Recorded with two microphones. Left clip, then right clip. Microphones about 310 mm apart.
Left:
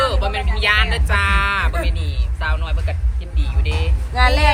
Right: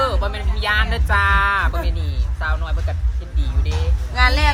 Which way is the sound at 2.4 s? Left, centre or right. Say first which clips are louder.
Left 1 dB; centre.